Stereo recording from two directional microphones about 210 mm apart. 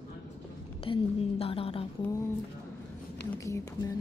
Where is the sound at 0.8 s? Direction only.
25° left (ahead or behind).